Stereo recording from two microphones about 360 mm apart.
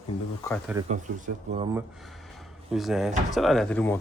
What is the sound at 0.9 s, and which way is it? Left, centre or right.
Speech, centre.